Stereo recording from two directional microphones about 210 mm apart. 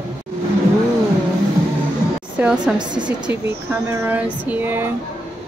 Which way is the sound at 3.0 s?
5° right (ahead or behind).